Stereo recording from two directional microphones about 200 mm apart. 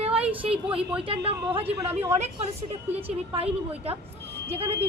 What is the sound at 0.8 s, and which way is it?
Speech, 5° right (ahead or behind).